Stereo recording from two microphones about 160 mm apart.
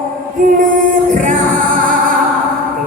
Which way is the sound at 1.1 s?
50° right (ahead or behind).